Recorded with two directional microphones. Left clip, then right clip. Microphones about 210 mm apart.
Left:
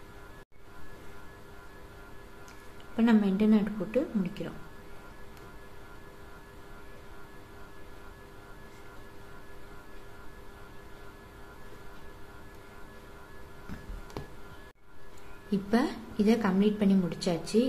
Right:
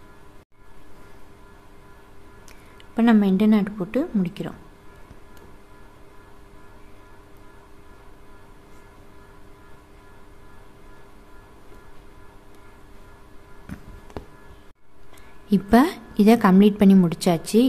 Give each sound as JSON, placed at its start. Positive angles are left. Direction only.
{"t": 3.0, "sound": "a woman's voice", "side_deg": -35}
{"t": 15.5, "sound": "a woman's voice", "side_deg": -40}